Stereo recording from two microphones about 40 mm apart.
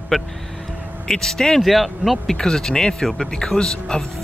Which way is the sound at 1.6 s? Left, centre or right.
Centre.